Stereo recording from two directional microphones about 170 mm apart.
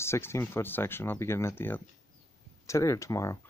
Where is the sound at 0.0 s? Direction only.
15° left (ahead or behind).